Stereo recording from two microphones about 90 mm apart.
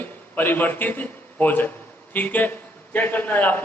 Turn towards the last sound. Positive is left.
turn(degrees=20)  # may be behind; listen again after turning